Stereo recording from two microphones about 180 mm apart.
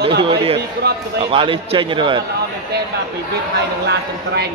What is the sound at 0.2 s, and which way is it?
Speech, 30° right (ahead or behind).